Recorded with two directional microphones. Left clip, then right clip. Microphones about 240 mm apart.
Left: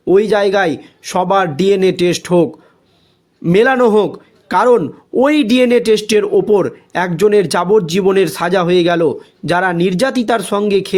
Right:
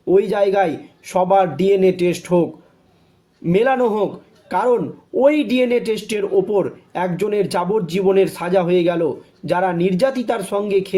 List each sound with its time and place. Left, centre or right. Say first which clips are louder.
0.1 s a man's voice: left 4 dB; left